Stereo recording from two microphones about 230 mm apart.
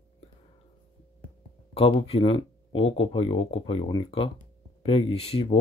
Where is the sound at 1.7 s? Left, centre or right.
Left.